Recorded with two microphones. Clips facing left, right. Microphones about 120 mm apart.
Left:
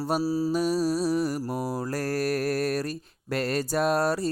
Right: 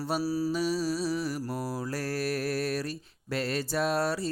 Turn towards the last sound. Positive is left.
turn(degrees=45)  # may be behind; listen again after turning